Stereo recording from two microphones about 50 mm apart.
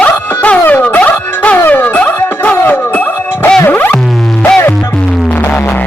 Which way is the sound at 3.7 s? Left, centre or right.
Left.